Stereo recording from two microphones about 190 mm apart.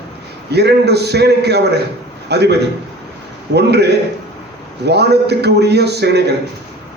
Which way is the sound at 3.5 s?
60° right (ahead or behind).